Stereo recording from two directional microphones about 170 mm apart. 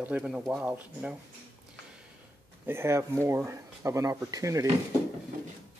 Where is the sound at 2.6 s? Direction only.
15° right (ahead or behind).